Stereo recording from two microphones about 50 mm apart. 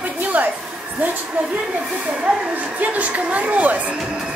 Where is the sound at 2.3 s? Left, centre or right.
Right.